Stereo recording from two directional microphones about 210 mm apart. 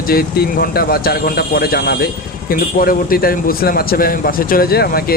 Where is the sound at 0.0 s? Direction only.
45° left (ahead or behind).